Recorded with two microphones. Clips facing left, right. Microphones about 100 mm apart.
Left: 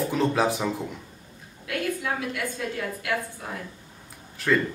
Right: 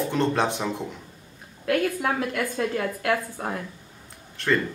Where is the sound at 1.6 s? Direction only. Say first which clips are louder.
Right 5 dB; 50° right (ahead or behind).